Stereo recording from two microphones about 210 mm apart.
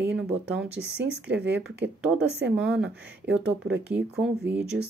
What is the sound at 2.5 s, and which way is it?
Speech, 5° right (ahead or behind).